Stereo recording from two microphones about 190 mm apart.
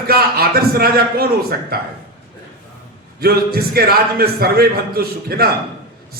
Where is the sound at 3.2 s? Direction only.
55° right (ahead or behind).